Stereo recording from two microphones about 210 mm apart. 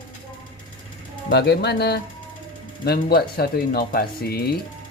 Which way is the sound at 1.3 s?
55° left (ahead or behind).